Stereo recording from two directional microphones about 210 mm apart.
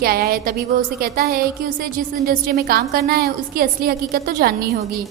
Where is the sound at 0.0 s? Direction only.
45° right (ahead or behind).